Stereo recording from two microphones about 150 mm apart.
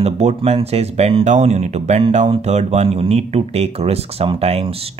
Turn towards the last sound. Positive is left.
turn(degrees=-45)  # may be behind; listen again after turning